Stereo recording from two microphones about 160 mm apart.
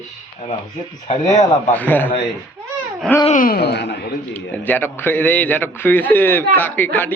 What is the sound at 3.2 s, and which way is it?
Speech, 55° left (ahead or behind).